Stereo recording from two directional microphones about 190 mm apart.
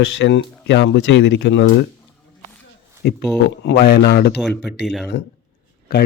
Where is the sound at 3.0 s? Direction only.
60° left (ahead or behind).